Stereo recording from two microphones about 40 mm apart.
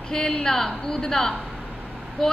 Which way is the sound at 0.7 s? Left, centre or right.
Centre.